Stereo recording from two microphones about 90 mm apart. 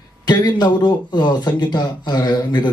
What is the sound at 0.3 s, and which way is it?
Speech, 55° left (ahead or behind).